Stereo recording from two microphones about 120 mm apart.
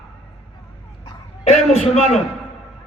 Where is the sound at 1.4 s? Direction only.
70° left (ahead or behind).